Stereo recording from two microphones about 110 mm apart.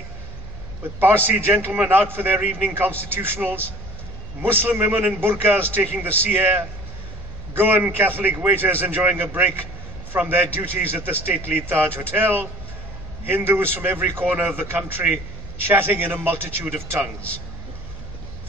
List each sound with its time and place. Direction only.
0.9 s a man's voice: 20° right (ahead or behind)